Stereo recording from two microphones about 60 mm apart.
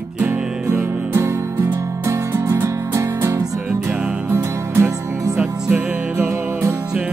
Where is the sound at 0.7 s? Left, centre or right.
Right.